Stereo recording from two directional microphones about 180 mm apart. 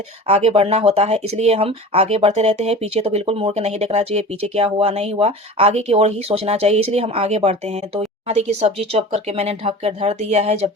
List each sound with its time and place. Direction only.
0.3 s speech: 35° right (ahead or behind)